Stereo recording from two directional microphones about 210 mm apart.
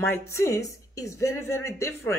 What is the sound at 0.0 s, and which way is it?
Speech, 10° left (ahead or behind).